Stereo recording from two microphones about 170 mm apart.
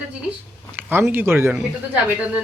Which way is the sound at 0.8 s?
10° right (ahead or behind).